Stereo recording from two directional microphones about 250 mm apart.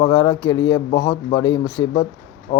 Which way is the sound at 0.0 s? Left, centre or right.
Centre.